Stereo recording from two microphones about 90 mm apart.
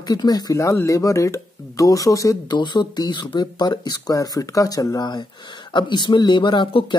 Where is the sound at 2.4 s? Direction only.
55° left (ahead or behind).